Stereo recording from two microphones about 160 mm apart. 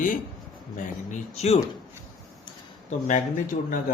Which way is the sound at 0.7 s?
45° left (ahead or behind).